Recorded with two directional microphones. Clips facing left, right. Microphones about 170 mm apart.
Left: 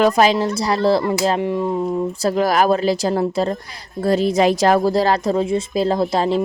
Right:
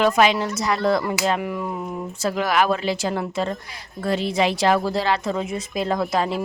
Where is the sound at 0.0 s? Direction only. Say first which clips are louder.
Left 3 dB; 35° left (ahead or behind).